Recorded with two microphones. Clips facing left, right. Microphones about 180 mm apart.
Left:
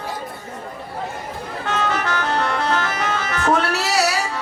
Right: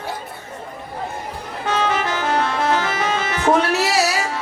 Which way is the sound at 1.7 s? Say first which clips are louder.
Right 2 dB; 20° right (ahead or behind).